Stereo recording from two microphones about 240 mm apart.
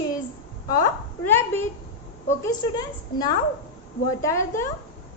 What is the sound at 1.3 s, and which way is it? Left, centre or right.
A woman's voice, centre.